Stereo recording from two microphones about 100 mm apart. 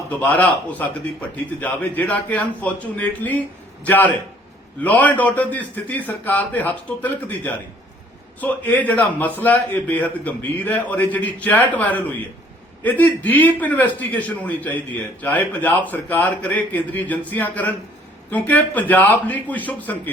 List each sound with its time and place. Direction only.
0.2 s a man's voice: 15° left (ahead or behind)